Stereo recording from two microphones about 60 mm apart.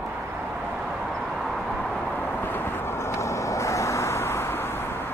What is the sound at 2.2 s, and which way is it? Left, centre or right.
Vehicle, left.